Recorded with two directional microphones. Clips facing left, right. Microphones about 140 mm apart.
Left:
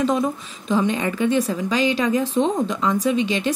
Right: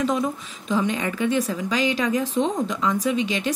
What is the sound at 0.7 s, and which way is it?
A woman's voice, 30° left (ahead or behind).